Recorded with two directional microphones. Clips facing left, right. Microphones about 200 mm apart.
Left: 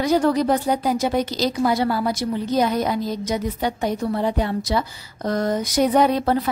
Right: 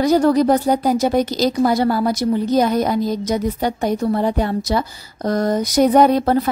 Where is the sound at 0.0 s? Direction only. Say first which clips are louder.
Right 4 dB; 40° right (ahead or behind).